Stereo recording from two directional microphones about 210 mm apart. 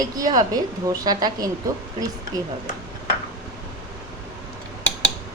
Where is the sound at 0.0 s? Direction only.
15° right (ahead or behind).